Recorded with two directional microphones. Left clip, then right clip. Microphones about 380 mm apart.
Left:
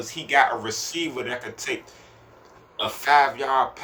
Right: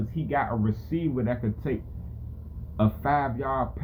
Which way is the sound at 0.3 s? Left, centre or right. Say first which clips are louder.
Left 8 dB; centre.